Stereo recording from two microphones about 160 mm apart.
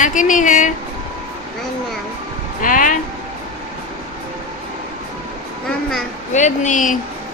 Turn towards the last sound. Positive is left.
turn(degrees=50)  # may be behind; listen again after turning